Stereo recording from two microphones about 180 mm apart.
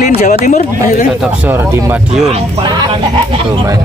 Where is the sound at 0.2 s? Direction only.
40° left (ahead or behind).